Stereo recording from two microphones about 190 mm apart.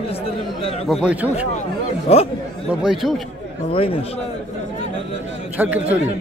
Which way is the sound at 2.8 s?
Centre (ahead or behind).